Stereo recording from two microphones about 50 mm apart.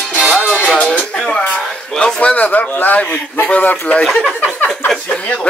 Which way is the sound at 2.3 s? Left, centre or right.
Left.